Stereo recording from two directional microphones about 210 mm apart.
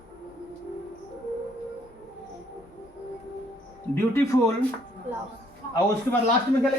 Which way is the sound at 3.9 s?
10° left (ahead or behind).